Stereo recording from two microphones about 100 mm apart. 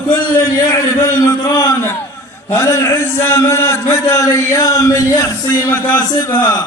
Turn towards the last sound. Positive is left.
turn(degrees=20)  # may be behind; listen again after turning